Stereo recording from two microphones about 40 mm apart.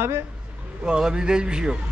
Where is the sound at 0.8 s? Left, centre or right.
Right.